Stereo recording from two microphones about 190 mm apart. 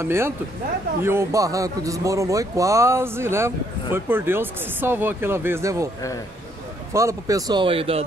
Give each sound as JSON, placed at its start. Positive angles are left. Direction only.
{"t": 0.0, "sound": "speech", "side_deg": -15}
{"t": 6.9, "sound": "speech", "side_deg": -15}